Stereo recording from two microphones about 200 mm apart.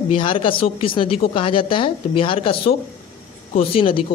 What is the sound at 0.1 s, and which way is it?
A woman's voice, 25° left (ahead or behind).